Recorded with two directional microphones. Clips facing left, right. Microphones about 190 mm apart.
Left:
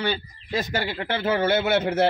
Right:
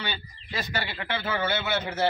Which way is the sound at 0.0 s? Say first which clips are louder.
Left 9 dB; 45° left (ahead or behind).